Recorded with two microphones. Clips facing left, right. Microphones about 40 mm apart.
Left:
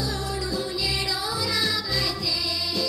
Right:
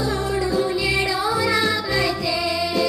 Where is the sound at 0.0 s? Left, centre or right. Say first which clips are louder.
Right 7 dB; right.